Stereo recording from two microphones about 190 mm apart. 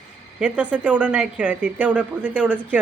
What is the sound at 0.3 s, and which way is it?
Speech, 5° right (ahead or behind).